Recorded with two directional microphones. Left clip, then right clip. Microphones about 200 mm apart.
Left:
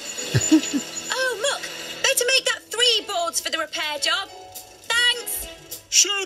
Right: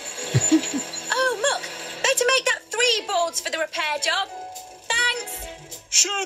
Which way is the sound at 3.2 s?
50° left (ahead or behind).